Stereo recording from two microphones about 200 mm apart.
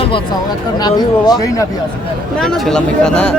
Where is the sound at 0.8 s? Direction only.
20° left (ahead or behind).